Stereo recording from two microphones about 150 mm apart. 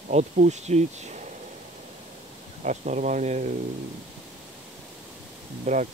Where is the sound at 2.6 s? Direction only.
50° right (ahead or behind).